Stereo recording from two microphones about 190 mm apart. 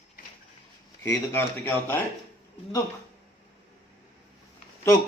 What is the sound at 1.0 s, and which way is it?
Speech, 10° left (ahead or behind).